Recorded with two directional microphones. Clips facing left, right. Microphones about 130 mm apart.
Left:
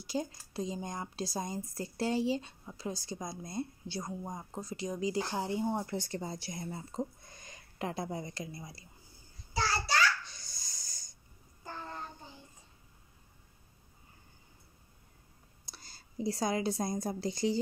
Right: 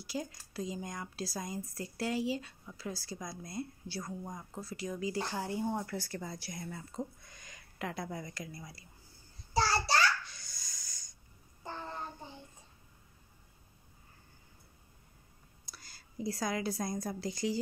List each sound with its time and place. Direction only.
0.0 s speech: 25° left (ahead or behind)
9.5 s child singing: 35° right (ahead or behind)
10.3 s snort: 30° left (ahead or behind)
15.6 s a woman's voice: 25° left (ahead or behind)